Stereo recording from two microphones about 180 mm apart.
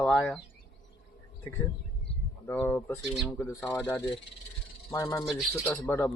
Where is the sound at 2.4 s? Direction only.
10° left (ahead or behind).